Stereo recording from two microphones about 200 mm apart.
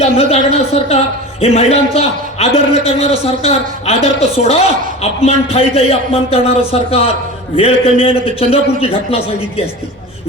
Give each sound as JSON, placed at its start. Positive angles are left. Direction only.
{"t": 0.0, "sound": "a man's voice", "side_deg": 30}